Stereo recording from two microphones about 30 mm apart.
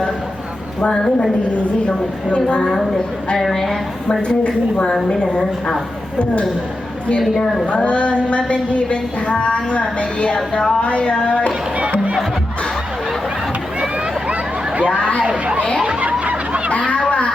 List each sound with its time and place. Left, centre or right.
0.9 s a woman's voice: centre
1.5 s a woman's voice: left
3.5 s a woman's voice: centre
4.3 s a woman's voice: left
7.2 s a woman's voice: centre
7.7 s a woman's voice: left
10.3 s a woman's voice: left
10.7 s a woman's voice: left
14.8 s a woman's voice: left
16.2 s a sound: right
16.7 s a sound: left